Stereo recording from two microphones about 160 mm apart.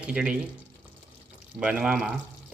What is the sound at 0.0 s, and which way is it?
Speech, 5° right (ahead or behind).